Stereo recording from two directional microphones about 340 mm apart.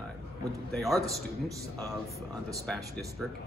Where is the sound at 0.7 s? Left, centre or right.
Centre.